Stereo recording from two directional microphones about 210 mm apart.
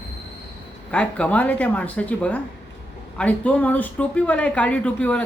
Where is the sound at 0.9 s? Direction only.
5° left (ahead or behind).